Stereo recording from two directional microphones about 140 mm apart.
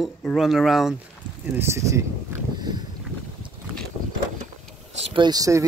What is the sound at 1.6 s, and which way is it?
Speech, 20° right (ahead or behind).